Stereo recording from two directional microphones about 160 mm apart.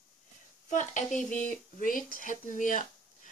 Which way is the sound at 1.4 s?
55° left (ahead or behind).